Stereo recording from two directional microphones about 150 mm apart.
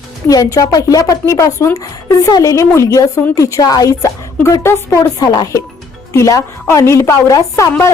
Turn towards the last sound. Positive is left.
turn(degrees=20)  # may be behind; listen again after turning